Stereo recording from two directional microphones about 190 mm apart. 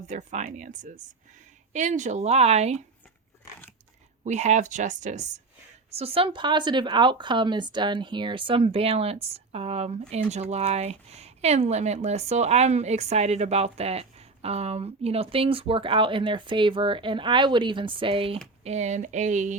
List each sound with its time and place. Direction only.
0.1 s speech: 40° right (ahead or behind)
4.2 s speech: 35° right (ahead or behind)